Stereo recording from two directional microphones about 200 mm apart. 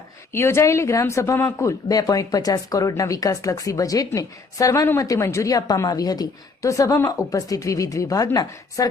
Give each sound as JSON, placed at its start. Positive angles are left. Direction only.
{"t": 0.3, "sound": "speech", "side_deg": 15}